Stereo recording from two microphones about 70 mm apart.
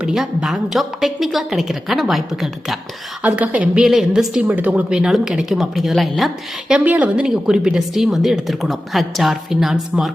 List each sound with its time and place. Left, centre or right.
0.2 s speech: centre
3.2 s a woman's voice: centre
3.8 s speech: centre
4.4 s a woman's voice: right; by 6.3 s centre
6.8 s a woman's voice: right
7.2 s speech: centre